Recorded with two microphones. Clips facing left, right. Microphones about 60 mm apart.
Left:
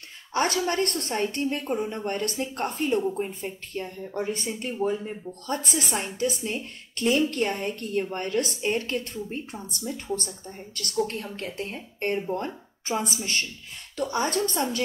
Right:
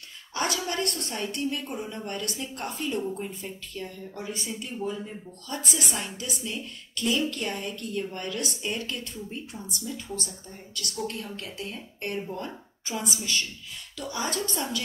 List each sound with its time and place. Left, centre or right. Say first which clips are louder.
0.3 s speech: left 5 dB; left